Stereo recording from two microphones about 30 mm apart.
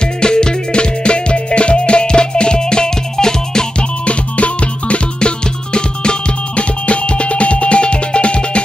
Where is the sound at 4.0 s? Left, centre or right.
Left.